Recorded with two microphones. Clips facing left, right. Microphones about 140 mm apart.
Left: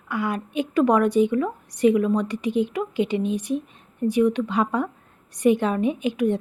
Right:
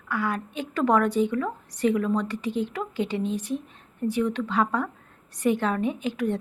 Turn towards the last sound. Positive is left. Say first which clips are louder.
# left 4 dB
turn(degrees=15)  # may be behind; listen again after turning